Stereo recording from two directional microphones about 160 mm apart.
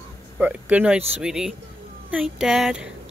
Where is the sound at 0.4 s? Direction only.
10° right (ahead or behind).